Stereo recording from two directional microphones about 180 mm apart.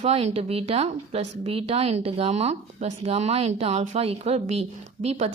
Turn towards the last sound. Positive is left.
turn(degrees=-35)  # may be behind; listen again after turning